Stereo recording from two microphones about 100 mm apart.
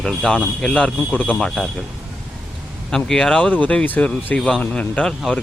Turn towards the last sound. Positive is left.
turn(degrees=10)  # may be behind; listen again after turning